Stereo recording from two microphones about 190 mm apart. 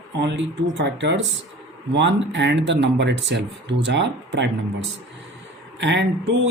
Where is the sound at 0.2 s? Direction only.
65° right (ahead or behind).